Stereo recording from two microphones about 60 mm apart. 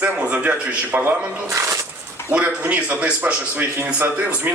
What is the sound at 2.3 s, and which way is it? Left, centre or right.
Speech, right.